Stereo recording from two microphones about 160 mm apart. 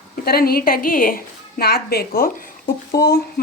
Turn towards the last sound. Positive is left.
turn(degrees=90)